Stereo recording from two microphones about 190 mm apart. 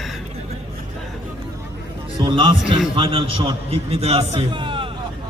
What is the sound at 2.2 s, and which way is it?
A man's voice, 25° right (ahead or behind).